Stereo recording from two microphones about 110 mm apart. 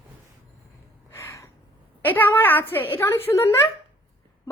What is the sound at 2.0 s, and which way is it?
A woman's voice, 15° left (ahead or behind).